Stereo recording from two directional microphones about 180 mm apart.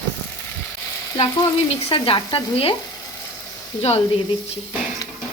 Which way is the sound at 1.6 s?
30° left (ahead or behind).